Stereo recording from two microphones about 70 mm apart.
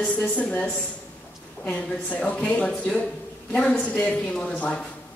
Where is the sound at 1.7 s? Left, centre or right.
Left.